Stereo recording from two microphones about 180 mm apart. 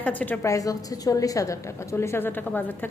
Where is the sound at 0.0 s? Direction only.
10° left (ahead or behind).